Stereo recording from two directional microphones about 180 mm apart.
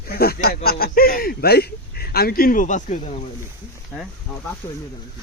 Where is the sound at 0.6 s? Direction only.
55° left (ahead or behind).